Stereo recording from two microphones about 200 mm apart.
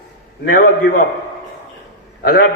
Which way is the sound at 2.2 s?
50° left (ahead or behind).